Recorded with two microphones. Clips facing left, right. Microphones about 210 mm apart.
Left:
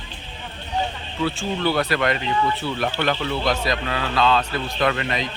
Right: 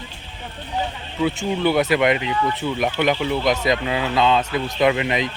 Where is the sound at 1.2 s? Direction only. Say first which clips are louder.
Right 3 dB; 15° right (ahead or behind).